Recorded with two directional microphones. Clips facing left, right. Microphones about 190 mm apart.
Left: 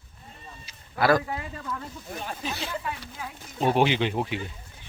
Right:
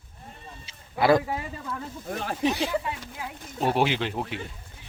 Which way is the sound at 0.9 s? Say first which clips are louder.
Right 2 dB; 20° right (ahead or behind).